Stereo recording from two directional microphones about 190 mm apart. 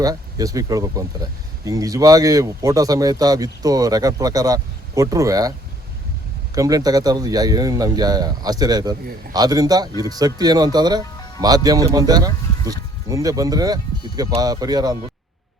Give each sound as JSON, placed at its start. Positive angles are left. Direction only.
{"t": 0.0, "sound": "speech", "side_deg": -20}